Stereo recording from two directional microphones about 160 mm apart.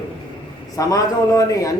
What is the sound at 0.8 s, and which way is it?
Speech, 20° left (ahead or behind).